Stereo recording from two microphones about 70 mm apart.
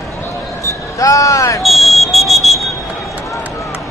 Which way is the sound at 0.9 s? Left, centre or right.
Left.